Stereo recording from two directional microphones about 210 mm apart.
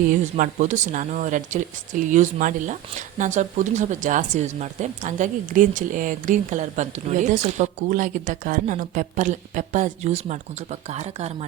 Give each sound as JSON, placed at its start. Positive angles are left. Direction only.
{"t": 0.1, "sound": "speech", "side_deg": -40}